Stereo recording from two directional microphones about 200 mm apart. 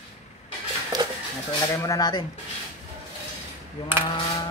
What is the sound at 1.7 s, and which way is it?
Speech, 15° left (ahead or behind).